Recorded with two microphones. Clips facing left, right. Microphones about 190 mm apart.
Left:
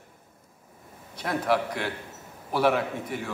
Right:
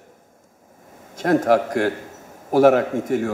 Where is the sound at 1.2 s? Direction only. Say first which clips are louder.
Right 9 dB; 45° right (ahead or behind).